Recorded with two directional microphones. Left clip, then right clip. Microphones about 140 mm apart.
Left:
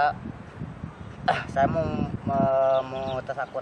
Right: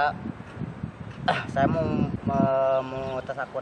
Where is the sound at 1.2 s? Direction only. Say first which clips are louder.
Left 1 dB; centre (ahead or behind).